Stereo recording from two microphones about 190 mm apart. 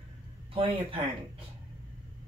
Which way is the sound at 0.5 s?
30° right (ahead or behind).